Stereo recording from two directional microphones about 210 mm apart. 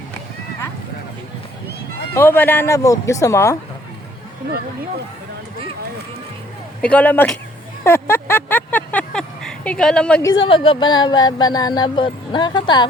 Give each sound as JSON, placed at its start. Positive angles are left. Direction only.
{"t": 2.1, "sound": "speech", "side_deg": 10}
{"t": 6.8, "sound": "speech", "side_deg": 5}
{"t": 7.9, "sound": "a sound", "side_deg": 10}
{"t": 10.2, "sound": "speech", "side_deg": 20}